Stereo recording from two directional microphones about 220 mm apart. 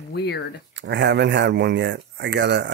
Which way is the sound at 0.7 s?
50° right (ahead or behind).